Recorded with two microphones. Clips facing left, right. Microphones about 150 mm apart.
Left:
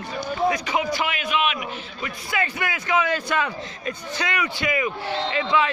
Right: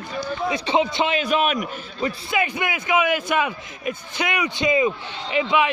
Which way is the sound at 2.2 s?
20° right (ahead or behind).